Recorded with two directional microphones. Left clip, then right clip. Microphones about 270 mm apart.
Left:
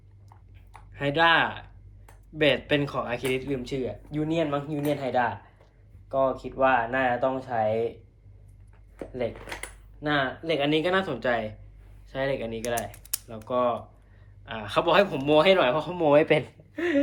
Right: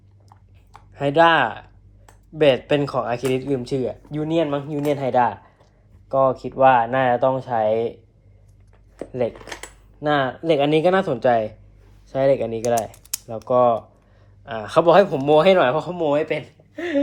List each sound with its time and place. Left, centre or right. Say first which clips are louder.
0.3 s a sound: right 4 dB; centre
2.6 s speech: right 6 dB; centre
9.0 s speech: right 7 dB; right
16.3 s speech: left 2 dB; centre